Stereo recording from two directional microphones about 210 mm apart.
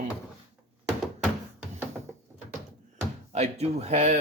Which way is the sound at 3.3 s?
30° right (ahead or behind).